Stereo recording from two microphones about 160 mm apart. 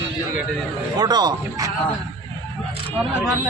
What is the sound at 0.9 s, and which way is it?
Speech, 25° right (ahead or behind).